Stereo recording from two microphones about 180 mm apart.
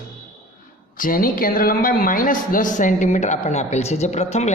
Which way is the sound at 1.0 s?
50° left (ahead or behind).